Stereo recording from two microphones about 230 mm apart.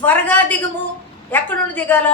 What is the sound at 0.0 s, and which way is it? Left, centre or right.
A woman's voice, centre.